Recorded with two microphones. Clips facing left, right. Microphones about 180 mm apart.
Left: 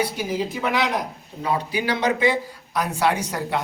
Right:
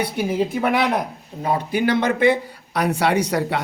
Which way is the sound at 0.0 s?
60° right (ahead or behind).